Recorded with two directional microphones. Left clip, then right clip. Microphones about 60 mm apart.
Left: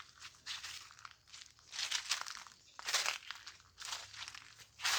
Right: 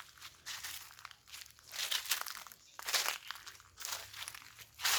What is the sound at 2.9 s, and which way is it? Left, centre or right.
Crumpling, centre.